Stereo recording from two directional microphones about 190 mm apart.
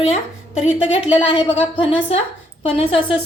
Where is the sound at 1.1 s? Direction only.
25° left (ahead or behind).